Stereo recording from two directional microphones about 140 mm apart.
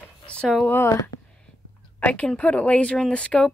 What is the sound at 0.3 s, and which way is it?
Speech, 5° left (ahead or behind).